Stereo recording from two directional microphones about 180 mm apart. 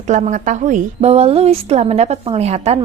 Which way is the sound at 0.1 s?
40° right (ahead or behind).